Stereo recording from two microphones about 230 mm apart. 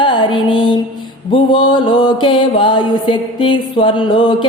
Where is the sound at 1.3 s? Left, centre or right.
Left.